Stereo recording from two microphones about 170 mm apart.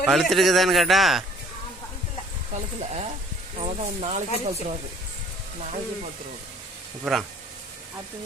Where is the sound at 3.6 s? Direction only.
40° right (ahead or behind).